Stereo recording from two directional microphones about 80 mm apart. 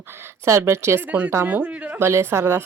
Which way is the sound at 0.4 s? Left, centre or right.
Right.